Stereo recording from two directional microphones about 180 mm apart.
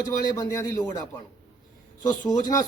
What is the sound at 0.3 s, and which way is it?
Speech, 20° left (ahead or behind).